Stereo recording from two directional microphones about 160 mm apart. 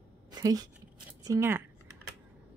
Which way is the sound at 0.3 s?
25° right (ahead or behind).